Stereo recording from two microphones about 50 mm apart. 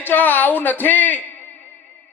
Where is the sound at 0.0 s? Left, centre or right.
Left.